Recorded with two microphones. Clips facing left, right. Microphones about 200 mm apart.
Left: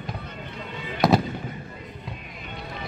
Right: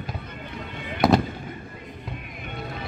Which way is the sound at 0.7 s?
55° right (ahead or behind).